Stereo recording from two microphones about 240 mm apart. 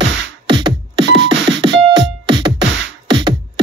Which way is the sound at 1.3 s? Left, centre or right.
Right.